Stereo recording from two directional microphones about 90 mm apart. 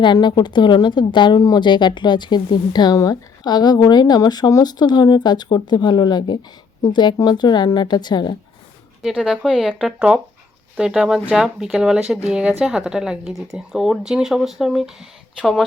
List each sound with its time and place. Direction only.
0.0 s speech: 55° left (ahead or behind)
9.0 s speech: 5° right (ahead or behind)